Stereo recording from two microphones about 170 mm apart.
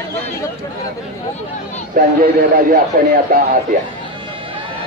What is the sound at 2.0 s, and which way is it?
Speech, 55° right (ahead or behind).